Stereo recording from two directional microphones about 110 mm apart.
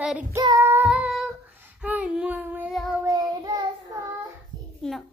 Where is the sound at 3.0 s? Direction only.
35° right (ahead or behind).